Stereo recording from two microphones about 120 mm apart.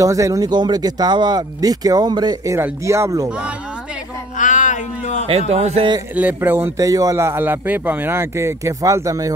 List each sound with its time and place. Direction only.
0.0 s speech: 25° right (ahead or behind)
2.5 s speech: 25° right (ahead or behind)
3.3 s speech: 10° right (ahead or behind)
4.4 s cat: 90° left
5.5 s a man's voice: 65° right (ahead or behind)
6.1 s speech: 15° right (ahead or behind)